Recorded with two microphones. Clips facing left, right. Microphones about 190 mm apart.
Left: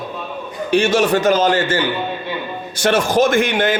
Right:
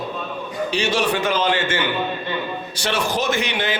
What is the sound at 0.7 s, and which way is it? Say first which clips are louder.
A man's voice: left 7 dB; 50° left (ahead or behind).